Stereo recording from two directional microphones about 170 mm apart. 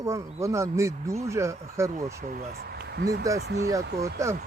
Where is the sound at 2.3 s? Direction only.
60° right (ahead or behind).